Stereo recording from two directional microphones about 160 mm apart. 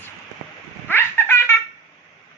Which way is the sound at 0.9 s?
15° left (ahead or behind).